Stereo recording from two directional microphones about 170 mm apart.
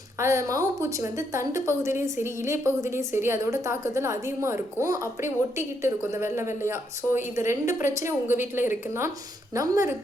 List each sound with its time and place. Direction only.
0.2 s a woman's voice: 15° right (ahead or behind)